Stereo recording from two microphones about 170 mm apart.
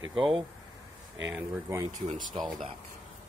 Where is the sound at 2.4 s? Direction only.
Centre (ahead or behind).